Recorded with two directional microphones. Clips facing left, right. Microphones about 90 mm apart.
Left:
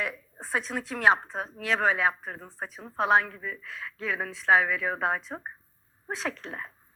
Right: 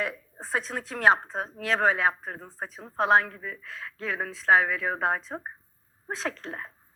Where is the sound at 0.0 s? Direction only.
35° right (ahead or behind).